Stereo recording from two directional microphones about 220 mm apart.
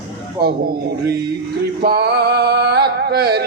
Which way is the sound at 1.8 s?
45° right (ahead or behind).